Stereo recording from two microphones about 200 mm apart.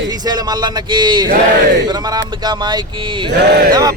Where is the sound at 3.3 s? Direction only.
55° right (ahead or behind).